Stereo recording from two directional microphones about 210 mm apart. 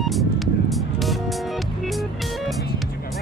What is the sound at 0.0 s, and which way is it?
Music, centre (ahead or behind).